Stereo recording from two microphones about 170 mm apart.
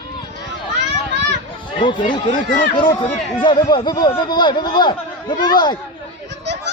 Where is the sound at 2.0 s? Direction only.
55° left (ahead or behind).